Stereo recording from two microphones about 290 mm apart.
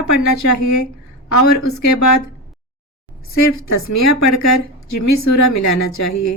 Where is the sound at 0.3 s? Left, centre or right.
Left.